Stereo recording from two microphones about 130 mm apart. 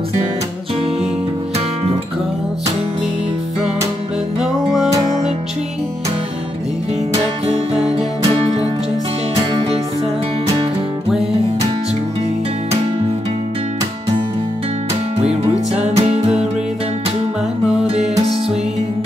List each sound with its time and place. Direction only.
9.5 s music: 45° right (ahead or behind)
15.1 s music: 50° right (ahead or behind)
17.8 s music: 55° right (ahead or behind)